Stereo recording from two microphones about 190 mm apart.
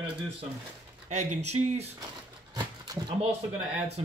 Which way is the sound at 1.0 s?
35° right (ahead or behind).